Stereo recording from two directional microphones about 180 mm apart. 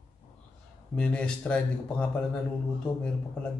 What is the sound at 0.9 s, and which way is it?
Speech, 5° left (ahead or behind).